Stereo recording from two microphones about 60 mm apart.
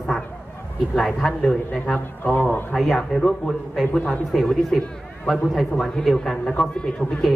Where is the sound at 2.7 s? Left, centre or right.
Centre.